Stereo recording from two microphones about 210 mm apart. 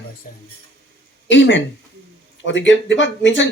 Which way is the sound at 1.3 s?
60° left (ahead or behind).